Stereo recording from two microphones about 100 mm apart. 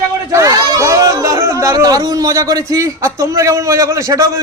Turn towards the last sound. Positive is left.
turn(degrees=-30)  # may be behind; listen again after turning